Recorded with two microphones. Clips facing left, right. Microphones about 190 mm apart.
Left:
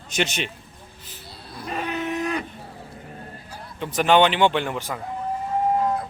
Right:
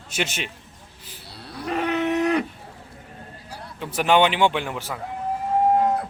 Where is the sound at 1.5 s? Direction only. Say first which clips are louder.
Right 5 dB; 70° right (ahead or behind).